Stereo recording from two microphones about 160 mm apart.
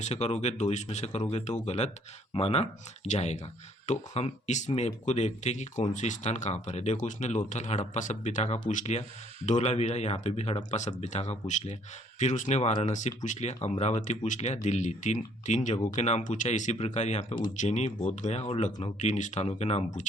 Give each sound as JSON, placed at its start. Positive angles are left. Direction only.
{"t": 0.0, "sound": "speech", "side_deg": 45}